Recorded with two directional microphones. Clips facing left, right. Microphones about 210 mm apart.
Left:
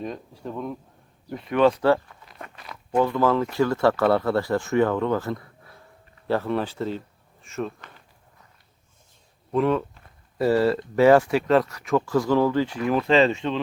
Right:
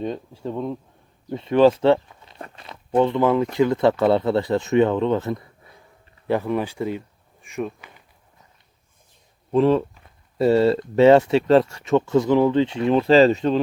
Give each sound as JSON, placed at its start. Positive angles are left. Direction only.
{"t": 0.4, "sound": "speech", "side_deg": -30}
{"t": 9.5, "sound": "speech", "side_deg": -30}